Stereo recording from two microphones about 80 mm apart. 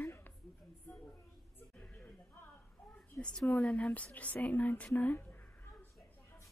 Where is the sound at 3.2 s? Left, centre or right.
Centre.